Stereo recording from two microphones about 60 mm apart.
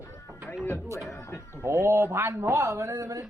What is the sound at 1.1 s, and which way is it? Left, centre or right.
Speech, left.